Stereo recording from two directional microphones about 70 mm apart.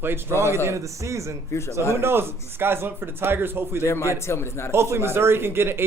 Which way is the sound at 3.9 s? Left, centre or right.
Left.